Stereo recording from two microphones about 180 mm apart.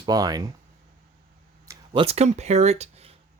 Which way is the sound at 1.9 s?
35° right (ahead or behind).